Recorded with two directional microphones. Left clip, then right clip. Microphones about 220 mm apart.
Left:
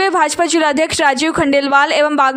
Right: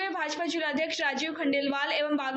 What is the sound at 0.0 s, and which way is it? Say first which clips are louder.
A woman's voice: left 17 dB; 55° left (ahead or behind).